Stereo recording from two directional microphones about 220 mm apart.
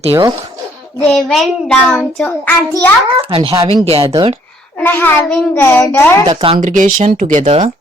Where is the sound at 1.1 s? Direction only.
Centre (ahead or behind).